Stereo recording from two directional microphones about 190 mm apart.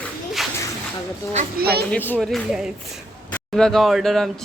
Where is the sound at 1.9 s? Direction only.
10° left (ahead or behind).